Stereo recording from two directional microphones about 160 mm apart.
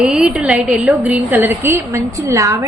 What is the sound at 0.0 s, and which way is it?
A woman's voice, 5° right (ahead or behind).